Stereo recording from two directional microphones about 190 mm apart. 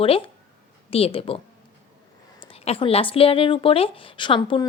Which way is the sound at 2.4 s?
30° left (ahead or behind).